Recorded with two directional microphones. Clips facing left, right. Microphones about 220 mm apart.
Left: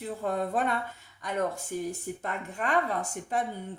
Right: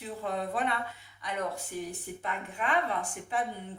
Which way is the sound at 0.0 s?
45° left (ahead or behind).